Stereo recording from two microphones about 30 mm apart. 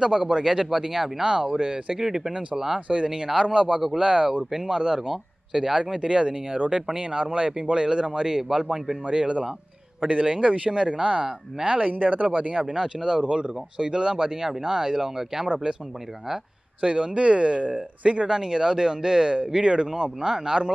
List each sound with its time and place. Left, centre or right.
0.3 s speech: centre
1.2 s speech: right
2.0 s speech: centre
2.9 s speech: right
5.9 s speech: right; by 8.9 s centre
9.0 s speech: right
11.9 s speech: right
12.6 s speech: right
16.8 s speech: right